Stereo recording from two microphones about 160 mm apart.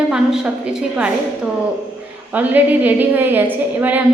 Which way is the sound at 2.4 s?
10° right (ahead or behind).